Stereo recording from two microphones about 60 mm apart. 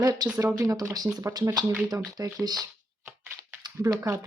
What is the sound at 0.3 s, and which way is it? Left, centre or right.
Speech, right.